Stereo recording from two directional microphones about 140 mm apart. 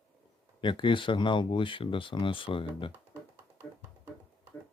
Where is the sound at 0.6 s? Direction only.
35° left (ahead or behind).